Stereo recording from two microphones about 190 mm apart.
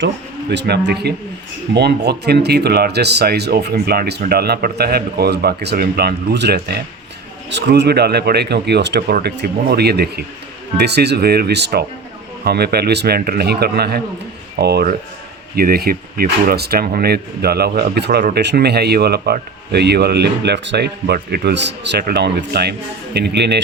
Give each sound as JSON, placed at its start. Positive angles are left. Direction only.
{"t": 0.5, "sound": "speech", "side_deg": -60}